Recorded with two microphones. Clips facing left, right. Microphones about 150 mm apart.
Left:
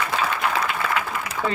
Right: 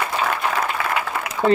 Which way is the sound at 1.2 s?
70° right (ahead or behind).